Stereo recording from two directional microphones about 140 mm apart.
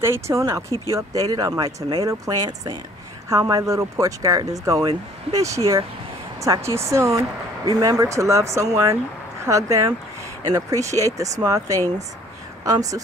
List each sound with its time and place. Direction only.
0.0 s speech: 20° right (ahead or behind)